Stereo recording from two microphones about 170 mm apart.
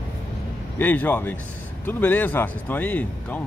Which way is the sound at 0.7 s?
10° left (ahead or behind).